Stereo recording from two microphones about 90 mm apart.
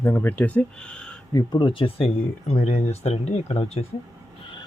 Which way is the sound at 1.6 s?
80° left.